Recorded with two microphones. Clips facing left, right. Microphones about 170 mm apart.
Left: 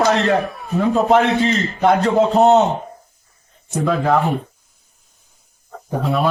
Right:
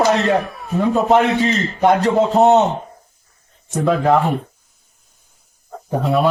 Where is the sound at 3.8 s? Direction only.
20° right (ahead or behind).